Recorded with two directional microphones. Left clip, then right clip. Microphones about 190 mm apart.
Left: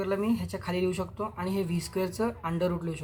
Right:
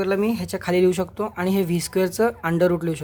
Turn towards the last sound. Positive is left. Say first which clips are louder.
# right 10 dB
turn(degrees=-65)  # may be behind; listen again after turning